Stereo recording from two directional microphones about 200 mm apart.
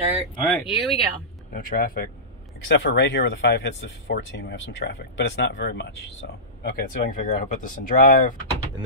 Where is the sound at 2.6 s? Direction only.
65° left (ahead or behind).